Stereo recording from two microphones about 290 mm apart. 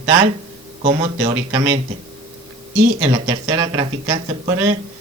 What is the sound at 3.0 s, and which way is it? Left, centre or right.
Speech, centre.